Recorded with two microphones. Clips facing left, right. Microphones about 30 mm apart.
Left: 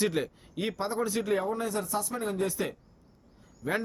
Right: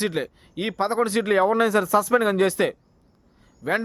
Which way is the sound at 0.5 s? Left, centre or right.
Right.